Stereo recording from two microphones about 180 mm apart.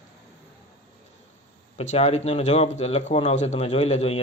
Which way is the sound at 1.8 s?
40° left (ahead or behind).